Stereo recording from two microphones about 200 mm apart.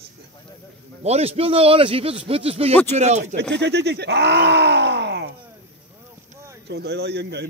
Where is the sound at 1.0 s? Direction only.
30° right (ahead or behind).